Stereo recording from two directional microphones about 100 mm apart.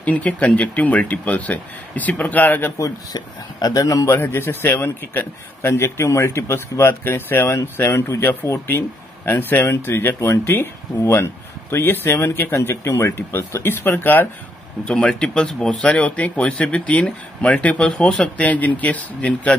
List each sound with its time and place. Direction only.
0.0 s speech: 15° left (ahead or behind)
2.8 s speech: 40° left (ahead or behind)
4.1 s a man's voice: 20° left (ahead or behind)
14.9 s speech: 10° left (ahead or behind)
18.5 s speech: 15° left (ahead or behind)